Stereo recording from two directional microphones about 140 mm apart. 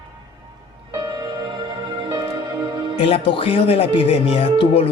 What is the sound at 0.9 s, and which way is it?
Music, 25° right (ahead or behind).